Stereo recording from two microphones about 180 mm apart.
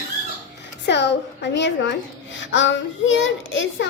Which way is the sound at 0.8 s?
70° left (ahead or behind).